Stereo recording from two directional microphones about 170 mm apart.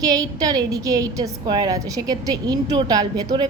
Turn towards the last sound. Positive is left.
turn(degrees=-25)  # may be behind; listen again after turning